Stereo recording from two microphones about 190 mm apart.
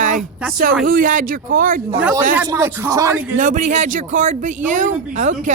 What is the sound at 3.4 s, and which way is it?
A man's voice, 40° right (ahead or behind).